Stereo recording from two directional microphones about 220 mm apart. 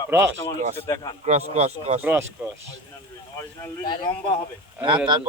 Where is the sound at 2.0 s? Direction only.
10° right (ahead or behind).